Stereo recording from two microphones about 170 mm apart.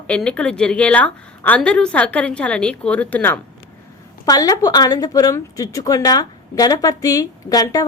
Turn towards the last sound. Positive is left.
turn(degrees=20)  # may be behind; listen again after turning